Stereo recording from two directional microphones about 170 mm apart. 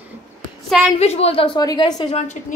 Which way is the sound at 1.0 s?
40° left (ahead or behind).